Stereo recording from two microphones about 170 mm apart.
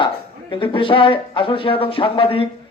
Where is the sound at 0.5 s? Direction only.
30° left (ahead or behind).